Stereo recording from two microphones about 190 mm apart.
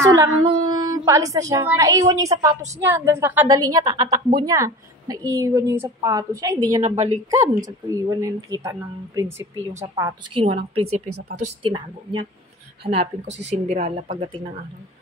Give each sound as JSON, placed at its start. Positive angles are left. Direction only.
{"t": 0.0, "sound": "a woman's voice", "side_deg": -20}
{"t": 6.8, "sound": "speech", "side_deg": -35}
{"t": 7.2, "sound": "a woman's voice", "side_deg": -15}
{"t": 10.4, "sound": "a woman's voice", "side_deg": -30}